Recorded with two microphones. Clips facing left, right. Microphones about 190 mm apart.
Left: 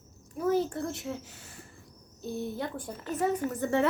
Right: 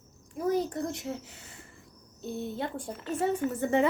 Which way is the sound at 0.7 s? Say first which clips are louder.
Right 1 dB; 20° right (ahead or behind).